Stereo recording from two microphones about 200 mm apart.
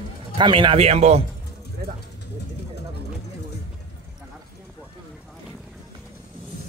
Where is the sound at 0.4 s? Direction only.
25° right (ahead or behind).